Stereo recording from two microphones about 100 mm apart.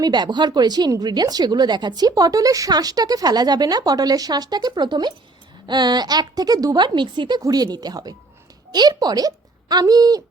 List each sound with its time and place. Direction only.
0.0 s speech: 45° right (ahead or behind)